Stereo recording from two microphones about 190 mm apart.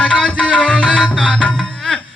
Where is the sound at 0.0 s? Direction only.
Centre (ahead or behind).